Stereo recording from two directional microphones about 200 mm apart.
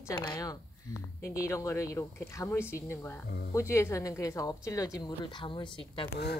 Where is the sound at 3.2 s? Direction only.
55° left (ahead or behind).